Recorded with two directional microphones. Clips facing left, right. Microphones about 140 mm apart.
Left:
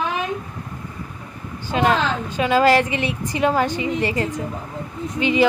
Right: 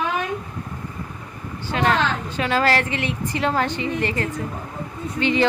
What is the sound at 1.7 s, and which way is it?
A woman's voice, 15° left (ahead or behind).